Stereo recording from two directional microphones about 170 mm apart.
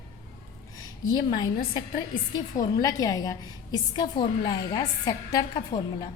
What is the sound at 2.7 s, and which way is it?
A woman's voice, 20° left (ahead or behind).